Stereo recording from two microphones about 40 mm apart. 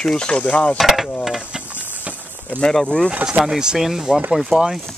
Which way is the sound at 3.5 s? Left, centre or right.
Centre.